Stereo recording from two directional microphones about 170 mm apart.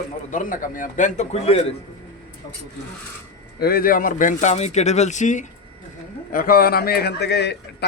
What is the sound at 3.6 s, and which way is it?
Speech, 60° left (ahead or behind).